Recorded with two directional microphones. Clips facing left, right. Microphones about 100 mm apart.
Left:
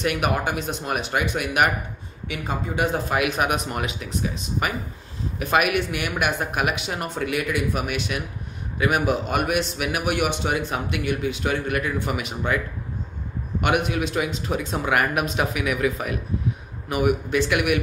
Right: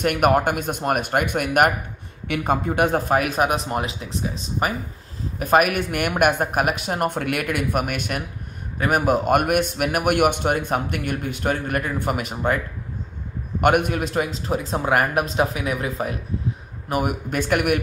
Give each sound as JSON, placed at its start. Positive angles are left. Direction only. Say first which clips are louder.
{"t": 0.0, "sound": "a man's voice", "louder": "right 5 dB", "side_deg": -50}
{"t": 13.6, "sound": "speech", "louder": "right 4 dB", "side_deg": -50}
{"t": 16.9, "sound": "a man's voice", "louder": "left 2 dB", "side_deg": -45}